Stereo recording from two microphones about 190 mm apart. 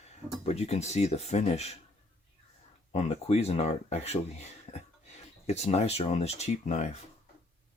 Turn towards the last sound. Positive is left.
turn(degrees=35)  # may be behind; listen again after turning